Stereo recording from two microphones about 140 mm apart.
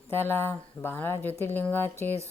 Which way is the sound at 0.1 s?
15° left (ahead or behind).